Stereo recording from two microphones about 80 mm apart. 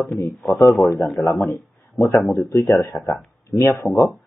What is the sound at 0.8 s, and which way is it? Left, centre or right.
Speech, left.